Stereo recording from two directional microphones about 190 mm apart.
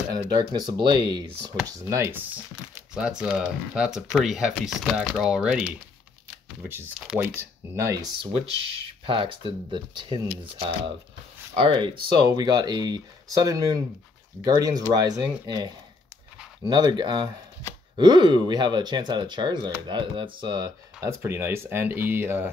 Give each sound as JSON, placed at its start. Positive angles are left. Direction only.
{"t": 0.3, "sound": "speech", "side_deg": -20}
{"t": 6.7, "sound": "speech", "side_deg": -10}
{"t": 11.5, "sound": "speech", "side_deg": -25}